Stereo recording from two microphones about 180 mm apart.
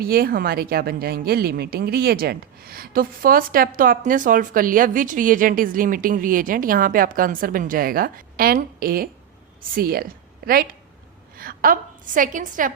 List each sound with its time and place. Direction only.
0.0 s a woman's voice: 55° right (ahead or behind)